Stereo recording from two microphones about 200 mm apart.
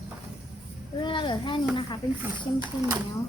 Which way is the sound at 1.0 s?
25° left (ahead or behind).